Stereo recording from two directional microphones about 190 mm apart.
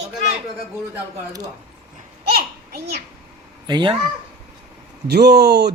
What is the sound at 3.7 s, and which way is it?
Speech, 25° right (ahead or behind).